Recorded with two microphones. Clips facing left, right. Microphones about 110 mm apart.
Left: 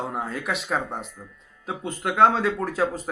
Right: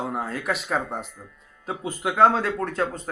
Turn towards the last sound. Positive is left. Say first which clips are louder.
# left 1 dB
turn(degrees=5)  # may be behind; listen again after turning